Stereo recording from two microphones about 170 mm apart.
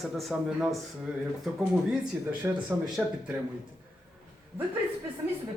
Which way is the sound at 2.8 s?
Centre (ahead or behind).